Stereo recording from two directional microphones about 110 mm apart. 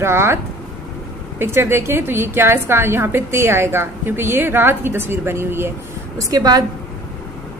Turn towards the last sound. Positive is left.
turn(degrees=-35)  # may be behind; listen again after turning